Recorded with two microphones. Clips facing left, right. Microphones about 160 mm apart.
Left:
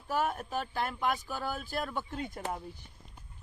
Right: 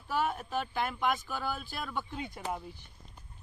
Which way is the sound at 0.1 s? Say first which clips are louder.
Even; 45° left (ahead or behind).